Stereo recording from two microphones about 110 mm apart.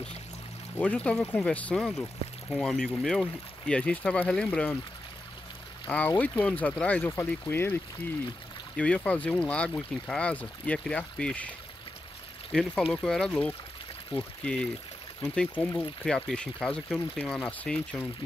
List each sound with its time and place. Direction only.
0.7 s speech: 10° left (ahead or behind)
2.5 s speech: centre (ahead or behind)
5.9 s speech: 15° left (ahead or behind)
8.7 s speech: 10° left (ahead or behind)
12.5 s speech: 10° left (ahead or behind)